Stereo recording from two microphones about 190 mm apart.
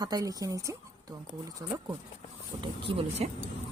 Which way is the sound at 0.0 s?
20° right (ahead or behind).